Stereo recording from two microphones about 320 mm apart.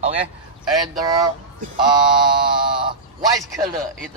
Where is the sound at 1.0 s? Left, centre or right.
Centre.